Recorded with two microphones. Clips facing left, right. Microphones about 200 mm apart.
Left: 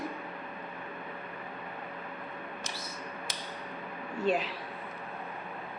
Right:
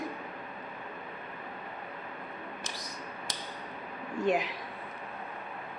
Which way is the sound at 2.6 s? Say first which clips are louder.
Left 1 dB; 15° right (ahead or behind).